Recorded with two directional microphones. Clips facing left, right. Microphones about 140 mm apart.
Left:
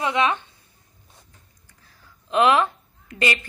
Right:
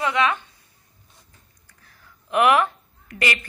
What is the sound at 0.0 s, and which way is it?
Speech, 25° left (ahead or behind).